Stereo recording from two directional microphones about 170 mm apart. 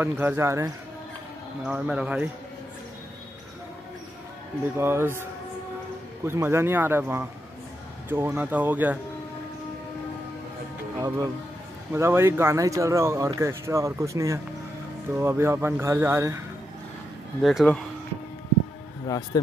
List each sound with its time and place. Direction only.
0.0 s speech: 10° right (ahead or behind)
1.7 s speech: 5° right (ahead or behind)
4.7 s speech: 15° right (ahead or behind)
6.2 s speech: 15° right (ahead or behind)
11.0 s speech: 15° right (ahead or behind)
17.4 s speech: centre (ahead or behind)
19.0 s speech: 20° left (ahead or behind)